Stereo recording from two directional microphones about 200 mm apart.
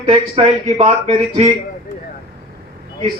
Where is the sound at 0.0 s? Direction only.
30° right (ahead or behind).